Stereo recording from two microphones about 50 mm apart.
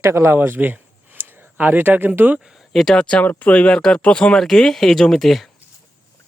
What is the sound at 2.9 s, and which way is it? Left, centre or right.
Speech, left.